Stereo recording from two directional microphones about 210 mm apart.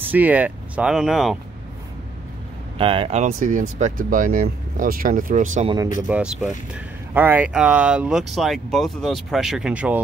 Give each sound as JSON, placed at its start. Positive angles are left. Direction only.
{"t": 0.1, "sound": "speech", "side_deg": -10}
{"t": 2.8, "sound": "speech", "side_deg": -25}
{"t": 6.0, "sound": "speech", "side_deg": -5}